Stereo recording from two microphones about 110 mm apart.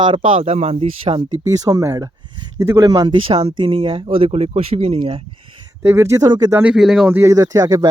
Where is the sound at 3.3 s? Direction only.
55° right (ahead or behind).